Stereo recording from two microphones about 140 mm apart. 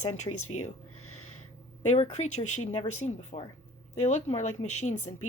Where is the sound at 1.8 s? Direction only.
55° left (ahead or behind).